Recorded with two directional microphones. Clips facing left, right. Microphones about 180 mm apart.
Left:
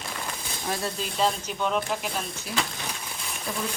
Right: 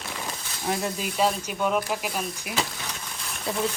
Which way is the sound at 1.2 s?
10° right (ahead or behind).